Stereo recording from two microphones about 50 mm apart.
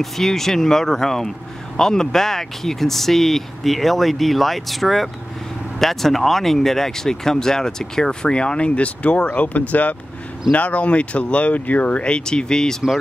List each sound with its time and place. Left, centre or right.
0.0 s speech: centre; by 12.0 s left
12.0 s speech: centre